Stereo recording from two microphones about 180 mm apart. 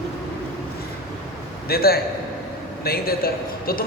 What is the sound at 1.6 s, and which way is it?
A man's voice, 60° left (ahead or behind).